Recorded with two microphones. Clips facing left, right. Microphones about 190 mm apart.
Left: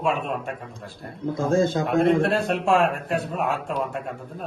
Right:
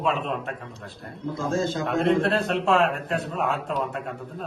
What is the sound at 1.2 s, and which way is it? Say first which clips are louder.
A man's voice: left 5 dB; 55° left (ahead or behind).